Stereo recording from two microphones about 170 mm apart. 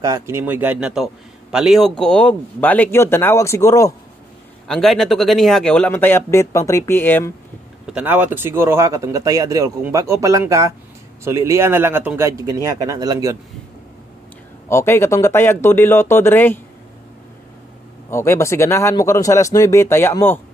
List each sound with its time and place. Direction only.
0.0 s speech: 15° right (ahead or behind); by 3.9 s 15° left (ahead or behind)
4.6 s speech: centre (ahead or behind)
7.9 s speech: 10° right (ahead or behind)
14.7 s speech: 15° left (ahead or behind)
18.1 s speech: 15° left (ahead or behind)